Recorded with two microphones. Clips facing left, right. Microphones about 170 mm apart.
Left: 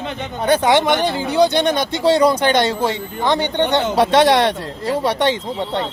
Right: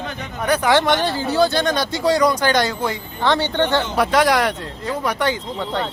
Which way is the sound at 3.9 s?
30° left (ahead or behind).